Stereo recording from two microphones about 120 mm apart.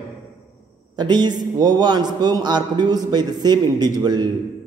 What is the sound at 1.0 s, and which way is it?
A man's voice, 35° right (ahead or behind).